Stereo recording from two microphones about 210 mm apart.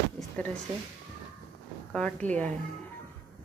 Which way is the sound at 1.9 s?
5° left (ahead or behind).